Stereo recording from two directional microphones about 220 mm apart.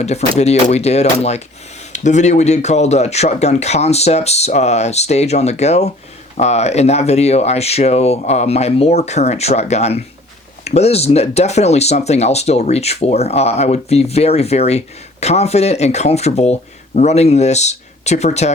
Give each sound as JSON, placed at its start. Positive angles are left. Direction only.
{"t": 0.0, "sound": "speech", "side_deg": 30}